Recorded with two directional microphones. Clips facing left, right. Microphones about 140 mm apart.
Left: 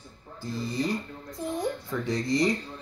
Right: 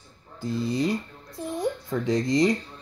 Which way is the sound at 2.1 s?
20° right (ahead or behind).